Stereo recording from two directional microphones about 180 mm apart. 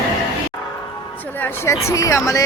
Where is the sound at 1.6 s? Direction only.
15° left (ahead or behind).